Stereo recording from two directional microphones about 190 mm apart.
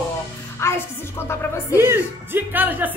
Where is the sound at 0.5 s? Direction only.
15° left (ahead or behind).